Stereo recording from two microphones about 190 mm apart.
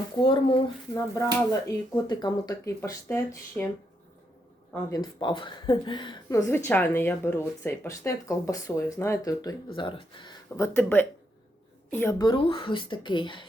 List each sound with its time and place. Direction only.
0.2 s speech: 25° left (ahead or behind)
0.9 s speech: 15° left (ahead or behind)
4.7 s speech: 20° left (ahead or behind)
10.6 s a woman's voice: 10° left (ahead or behind)
12.2 s speech: 25° left (ahead or behind)